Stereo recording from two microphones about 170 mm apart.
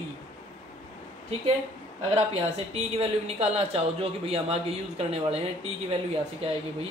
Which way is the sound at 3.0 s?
35° right (ahead or behind).